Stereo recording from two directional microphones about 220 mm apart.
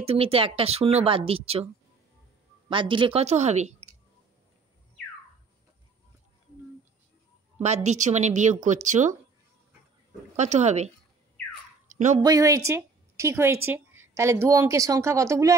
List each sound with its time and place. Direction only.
0.0 s speech: 25° right (ahead or behind)
2.7 s speech: 20° right (ahead or behind)
7.5 s a woman's voice: 30° right (ahead or behind)
10.3 s a woman's voice: 30° right (ahead or behind)
11.9 s a sound: 35° right (ahead or behind)
12.2 s a woman's voice: 15° right (ahead or behind)